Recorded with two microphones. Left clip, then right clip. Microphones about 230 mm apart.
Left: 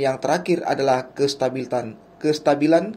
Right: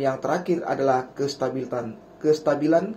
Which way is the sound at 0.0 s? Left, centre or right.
Left.